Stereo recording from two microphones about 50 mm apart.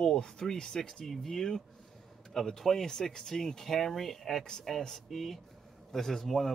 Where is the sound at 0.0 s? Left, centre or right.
Centre.